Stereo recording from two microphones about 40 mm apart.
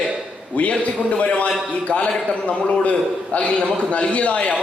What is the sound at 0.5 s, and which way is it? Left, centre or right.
A man's voice, left.